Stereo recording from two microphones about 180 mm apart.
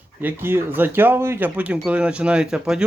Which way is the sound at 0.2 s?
10° right (ahead or behind).